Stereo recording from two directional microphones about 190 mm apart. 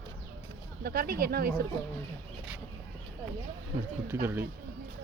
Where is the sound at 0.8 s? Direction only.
55° right (ahead or behind).